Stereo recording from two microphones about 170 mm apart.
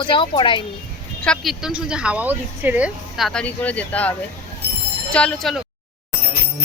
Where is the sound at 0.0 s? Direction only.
30° left (ahead or behind).